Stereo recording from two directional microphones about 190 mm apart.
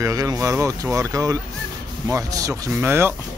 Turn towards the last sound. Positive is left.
turn(degrees=-10)  # may be behind; listen again after turning